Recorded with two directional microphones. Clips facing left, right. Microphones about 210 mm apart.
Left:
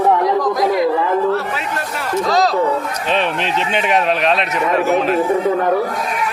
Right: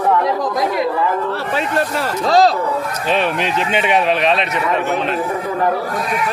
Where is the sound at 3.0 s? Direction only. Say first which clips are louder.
Right 1 dB; 5° right (ahead or behind).